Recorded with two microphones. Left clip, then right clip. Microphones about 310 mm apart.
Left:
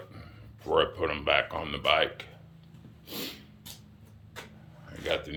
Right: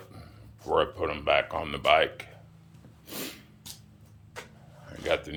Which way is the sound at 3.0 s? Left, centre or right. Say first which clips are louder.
Even; centre.